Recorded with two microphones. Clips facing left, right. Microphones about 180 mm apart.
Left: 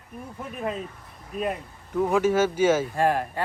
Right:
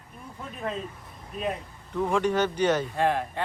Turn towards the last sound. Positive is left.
turn(degrees=10)  # may be behind; listen again after turning